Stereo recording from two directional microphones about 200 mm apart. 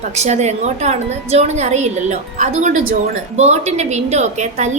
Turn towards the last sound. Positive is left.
turn(degrees=-35)  # may be behind; listen again after turning